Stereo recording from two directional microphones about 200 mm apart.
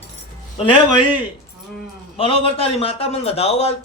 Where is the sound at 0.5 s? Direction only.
25° left (ahead or behind).